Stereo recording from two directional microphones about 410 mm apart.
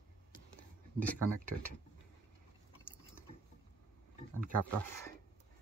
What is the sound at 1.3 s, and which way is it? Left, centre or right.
Speech, centre.